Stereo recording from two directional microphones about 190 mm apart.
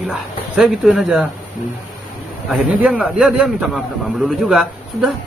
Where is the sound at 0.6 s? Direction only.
5° right (ahead or behind).